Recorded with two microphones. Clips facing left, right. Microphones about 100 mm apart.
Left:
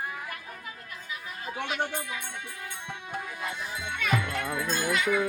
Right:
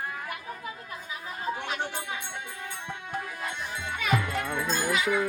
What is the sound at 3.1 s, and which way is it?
Music, centre (ahead or behind).